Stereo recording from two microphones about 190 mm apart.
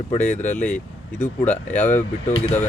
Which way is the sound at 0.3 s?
40° left (ahead or behind).